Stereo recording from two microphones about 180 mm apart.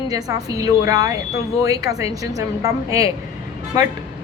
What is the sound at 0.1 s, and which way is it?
A woman's voice, 20° right (ahead or behind).